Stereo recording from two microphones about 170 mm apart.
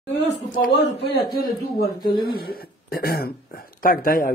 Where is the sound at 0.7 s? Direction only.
65° left (ahead or behind).